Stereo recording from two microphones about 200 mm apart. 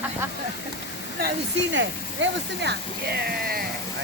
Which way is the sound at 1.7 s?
65° right (ahead or behind).